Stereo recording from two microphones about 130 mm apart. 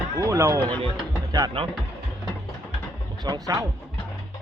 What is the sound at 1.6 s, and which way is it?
Speech, 45° right (ahead or behind).